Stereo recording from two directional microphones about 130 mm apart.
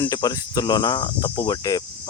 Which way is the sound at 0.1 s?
30° left (ahead or behind).